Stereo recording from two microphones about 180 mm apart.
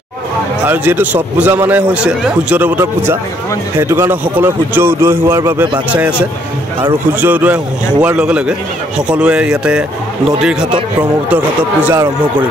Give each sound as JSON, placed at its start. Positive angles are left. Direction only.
{"t": 0.7, "sound": "a man's voice", "side_deg": -10}
{"t": 11.8, "sound": "a man's voice", "side_deg": -15}